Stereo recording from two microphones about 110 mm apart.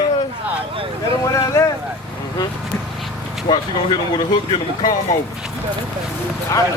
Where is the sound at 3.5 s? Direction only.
45° left (ahead or behind).